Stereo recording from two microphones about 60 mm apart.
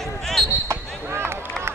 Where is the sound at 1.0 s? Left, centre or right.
Right.